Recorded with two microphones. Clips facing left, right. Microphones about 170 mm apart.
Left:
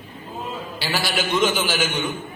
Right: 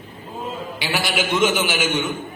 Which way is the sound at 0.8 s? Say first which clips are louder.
Right 1 dB; 10° right (ahead or behind).